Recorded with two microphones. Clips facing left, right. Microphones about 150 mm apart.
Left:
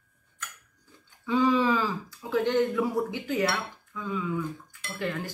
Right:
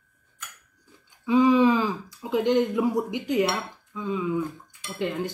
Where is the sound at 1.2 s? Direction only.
15° right (ahead or behind).